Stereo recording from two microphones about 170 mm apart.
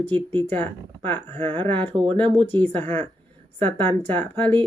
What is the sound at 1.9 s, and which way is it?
Speech, 30° right (ahead or behind).